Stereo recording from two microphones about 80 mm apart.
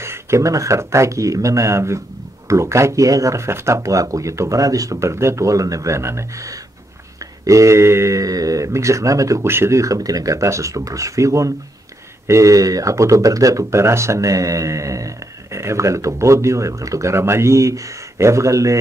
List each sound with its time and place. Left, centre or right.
0.0 s speech: right